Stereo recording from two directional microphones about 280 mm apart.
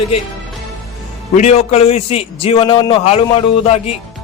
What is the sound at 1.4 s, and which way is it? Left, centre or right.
A man's voice, left.